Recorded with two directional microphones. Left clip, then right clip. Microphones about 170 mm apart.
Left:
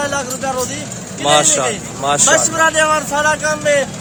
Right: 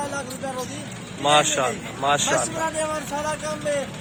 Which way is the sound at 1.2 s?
10° left (ahead or behind).